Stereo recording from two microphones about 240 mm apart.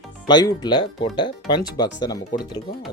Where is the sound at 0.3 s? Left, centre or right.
Centre.